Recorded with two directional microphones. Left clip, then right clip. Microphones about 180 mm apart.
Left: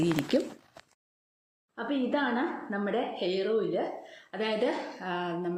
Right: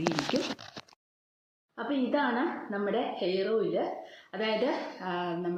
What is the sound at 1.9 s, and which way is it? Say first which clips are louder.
A woman's voice: right 1 dB; 10° left (ahead or behind).